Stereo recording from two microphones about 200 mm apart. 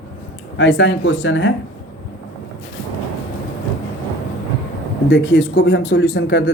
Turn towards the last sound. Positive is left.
turn(degrees=55)  # may be behind; listen again after turning